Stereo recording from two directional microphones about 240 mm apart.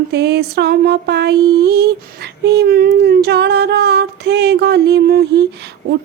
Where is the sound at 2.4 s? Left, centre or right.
Right.